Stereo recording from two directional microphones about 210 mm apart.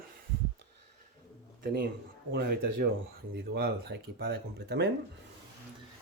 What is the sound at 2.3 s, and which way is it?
Speech, 50° right (ahead or behind).